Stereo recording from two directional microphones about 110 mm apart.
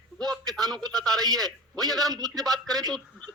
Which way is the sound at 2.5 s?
35° right (ahead or behind).